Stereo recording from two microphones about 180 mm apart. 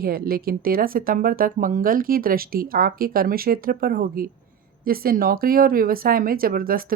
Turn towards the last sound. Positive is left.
turn(degrees=-55)  # may be behind; listen again after turning